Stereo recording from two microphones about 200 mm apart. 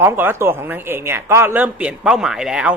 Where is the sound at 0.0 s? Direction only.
10° right (ahead or behind).